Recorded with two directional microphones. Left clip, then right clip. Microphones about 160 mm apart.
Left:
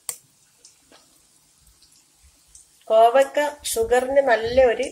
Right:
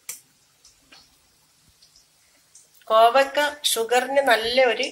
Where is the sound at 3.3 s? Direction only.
45° left (ahead or behind).